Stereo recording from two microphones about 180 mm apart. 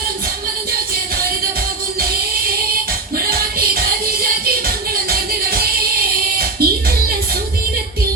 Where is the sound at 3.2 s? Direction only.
55° right (ahead or behind).